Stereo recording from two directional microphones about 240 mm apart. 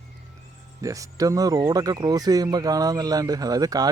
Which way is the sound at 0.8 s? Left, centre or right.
Centre.